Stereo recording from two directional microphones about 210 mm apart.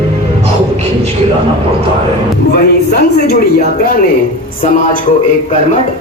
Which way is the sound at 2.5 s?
50° left (ahead or behind).